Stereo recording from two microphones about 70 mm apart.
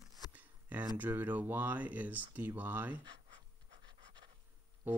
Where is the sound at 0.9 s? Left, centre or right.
Right.